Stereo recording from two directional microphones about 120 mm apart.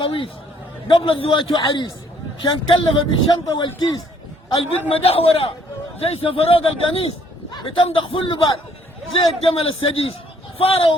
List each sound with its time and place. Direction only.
0.0 s a man's voice: 45° left (ahead or behind)
4.9 s a man's voice: 55° left (ahead or behind)
7.5 s a man's voice: 40° left (ahead or behind)
7.9 s a man's voice: 50° left (ahead or behind)